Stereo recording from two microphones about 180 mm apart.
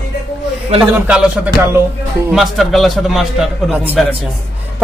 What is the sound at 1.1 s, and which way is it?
A woman's voice, 5° right (ahead or behind).